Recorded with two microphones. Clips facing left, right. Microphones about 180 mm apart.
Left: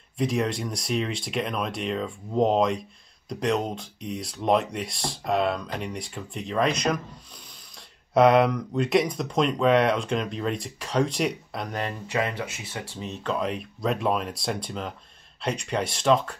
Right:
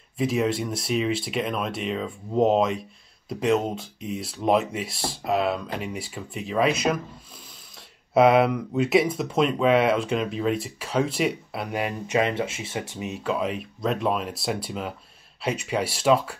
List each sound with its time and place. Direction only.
0.2 s speech: 5° right (ahead or behind)
8.1 s speech: 5° right (ahead or behind)
12.1 s speech: 25° right (ahead or behind)
12.9 s speech: 10° right (ahead or behind)